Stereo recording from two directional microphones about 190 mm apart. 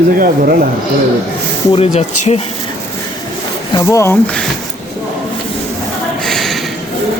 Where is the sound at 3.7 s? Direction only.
15° left (ahead or behind).